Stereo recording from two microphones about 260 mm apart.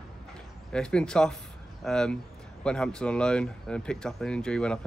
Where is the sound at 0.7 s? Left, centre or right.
Centre.